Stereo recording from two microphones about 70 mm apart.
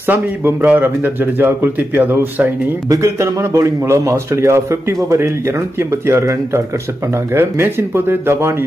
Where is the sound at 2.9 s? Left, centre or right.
Right.